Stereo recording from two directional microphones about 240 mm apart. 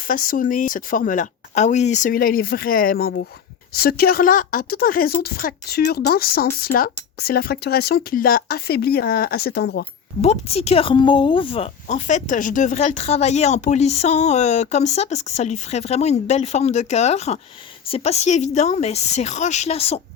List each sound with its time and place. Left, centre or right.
0.0 s speech: left
10.2 s speech: left